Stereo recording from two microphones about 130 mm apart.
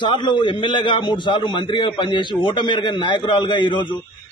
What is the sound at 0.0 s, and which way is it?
A man's voice, 35° left (ahead or behind).